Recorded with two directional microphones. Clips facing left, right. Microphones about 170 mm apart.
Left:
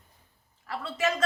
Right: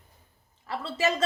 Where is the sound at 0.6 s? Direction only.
30° right (ahead or behind).